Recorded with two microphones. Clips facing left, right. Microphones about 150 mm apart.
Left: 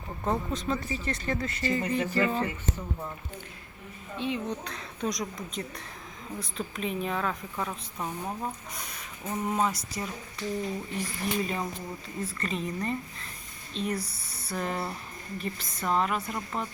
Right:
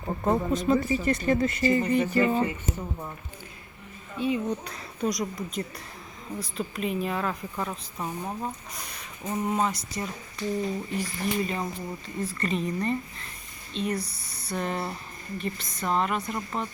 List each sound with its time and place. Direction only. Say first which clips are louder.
0.3 s speech: right 6 dB; 10° right (ahead or behind)
4.2 s a woman's voice: right 4 dB; 5° right (ahead or behind)
11.2 s a woman's voice: right 1 dB; centre (ahead or behind)